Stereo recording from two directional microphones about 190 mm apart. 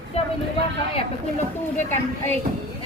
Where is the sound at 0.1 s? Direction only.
35° left (ahead or behind).